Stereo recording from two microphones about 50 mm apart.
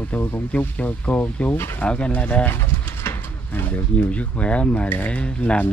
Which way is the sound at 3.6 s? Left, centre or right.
Left.